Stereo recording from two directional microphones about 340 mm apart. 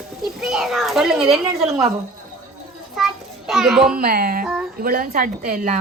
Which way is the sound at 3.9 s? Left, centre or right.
Right.